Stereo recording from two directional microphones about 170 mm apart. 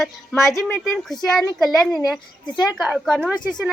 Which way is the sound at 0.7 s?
Centre (ahead or behind).